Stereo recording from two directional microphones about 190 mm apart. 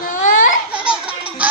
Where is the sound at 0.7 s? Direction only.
5° right (ahead or behind).